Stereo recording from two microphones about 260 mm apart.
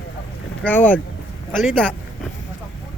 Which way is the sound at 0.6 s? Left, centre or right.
Centre.